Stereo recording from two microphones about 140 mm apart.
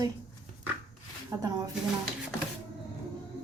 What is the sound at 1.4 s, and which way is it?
Speech, 25° right (ahead or behind).